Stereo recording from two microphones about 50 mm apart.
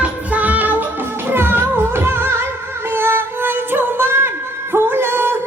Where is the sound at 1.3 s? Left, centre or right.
Right.